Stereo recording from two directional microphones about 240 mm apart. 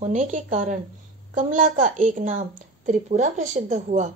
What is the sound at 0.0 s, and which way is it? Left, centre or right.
A woman's voice, right.